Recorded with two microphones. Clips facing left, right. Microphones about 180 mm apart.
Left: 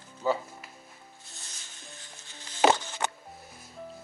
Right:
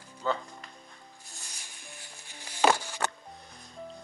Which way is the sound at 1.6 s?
15° right (ahead or behind).